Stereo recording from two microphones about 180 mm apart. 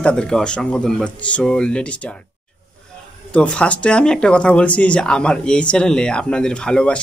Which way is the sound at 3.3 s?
5° left (ahead or behind).